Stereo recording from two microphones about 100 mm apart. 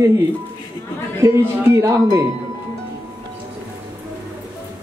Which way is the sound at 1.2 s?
25° right (ahead or behind).